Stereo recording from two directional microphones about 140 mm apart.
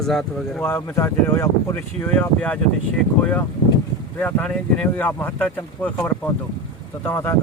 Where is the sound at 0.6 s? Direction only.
15° left (ahead or behind).